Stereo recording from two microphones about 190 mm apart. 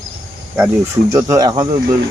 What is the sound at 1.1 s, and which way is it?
Speech, 15° right (ahead or behind).